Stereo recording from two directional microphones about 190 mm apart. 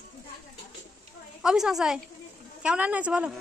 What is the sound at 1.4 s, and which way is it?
A woman's voice, 5° right (ahead or behind).